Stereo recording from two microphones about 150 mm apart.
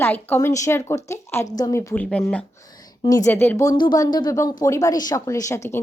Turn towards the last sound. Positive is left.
turn(degrees=20)  # may be behind; listen again after turning